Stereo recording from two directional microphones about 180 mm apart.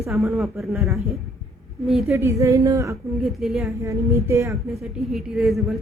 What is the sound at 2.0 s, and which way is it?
Speech, 15° right (ahead or behind).